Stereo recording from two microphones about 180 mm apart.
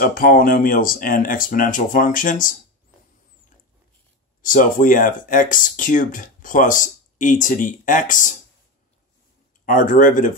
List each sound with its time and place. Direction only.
0.0 s speech: 50° left (ahead or behind)
4.4 s speech: 50° left (ahead or behind)
9.7 s speech: 50° left (ahead or behind)